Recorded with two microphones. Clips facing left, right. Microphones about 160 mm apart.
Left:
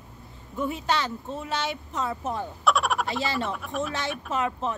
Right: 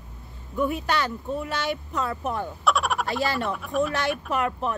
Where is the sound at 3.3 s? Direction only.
55° right (ahead or behind).